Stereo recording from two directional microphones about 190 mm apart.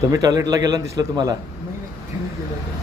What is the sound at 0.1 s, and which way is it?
A man's voice, 20° right (ahead or behind).